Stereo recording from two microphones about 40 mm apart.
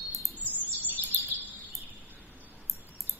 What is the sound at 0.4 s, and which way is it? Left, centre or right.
Bird, left.